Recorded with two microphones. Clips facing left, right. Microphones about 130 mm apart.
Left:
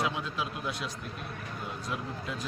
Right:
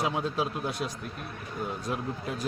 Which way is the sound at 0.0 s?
35° right (ahead or behind).